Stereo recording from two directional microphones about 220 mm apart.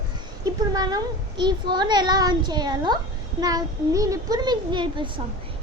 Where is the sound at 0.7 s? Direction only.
15° right (ahead or behind).